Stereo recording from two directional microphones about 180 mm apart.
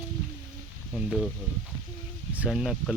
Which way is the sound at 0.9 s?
Centre (ahead or behind).